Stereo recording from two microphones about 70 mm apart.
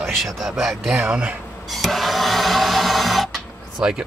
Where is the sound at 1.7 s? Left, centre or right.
Centre.